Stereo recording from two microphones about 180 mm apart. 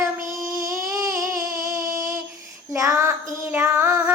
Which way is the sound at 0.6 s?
15° right (ahead or behind).